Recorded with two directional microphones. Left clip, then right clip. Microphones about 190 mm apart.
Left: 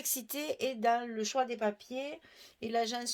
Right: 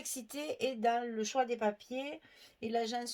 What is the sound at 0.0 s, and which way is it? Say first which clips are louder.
Speech: left 3 dB; 40° left (ahead or behind).